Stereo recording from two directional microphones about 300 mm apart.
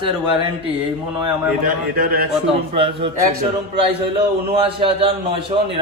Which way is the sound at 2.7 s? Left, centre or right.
Centre.